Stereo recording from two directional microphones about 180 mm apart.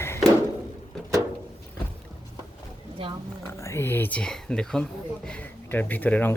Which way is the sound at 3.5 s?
15° left (ahead or behind).